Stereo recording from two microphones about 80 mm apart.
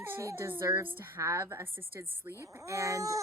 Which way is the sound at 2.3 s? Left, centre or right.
Right.